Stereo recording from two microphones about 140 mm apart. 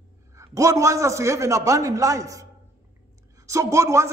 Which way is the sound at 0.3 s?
20° right (ahead or behind).